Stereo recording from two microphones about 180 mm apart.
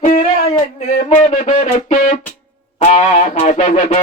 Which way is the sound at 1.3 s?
40° left (ahead or behind).